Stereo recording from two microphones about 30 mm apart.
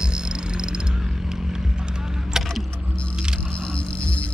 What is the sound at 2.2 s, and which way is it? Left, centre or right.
Vehicle, centre.